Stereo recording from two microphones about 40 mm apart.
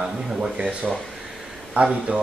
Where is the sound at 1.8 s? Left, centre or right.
Right.